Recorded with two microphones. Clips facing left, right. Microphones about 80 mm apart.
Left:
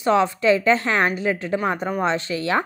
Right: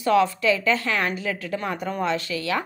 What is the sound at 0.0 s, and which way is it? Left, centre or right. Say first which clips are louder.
A woman's voice: left 1 dB; left.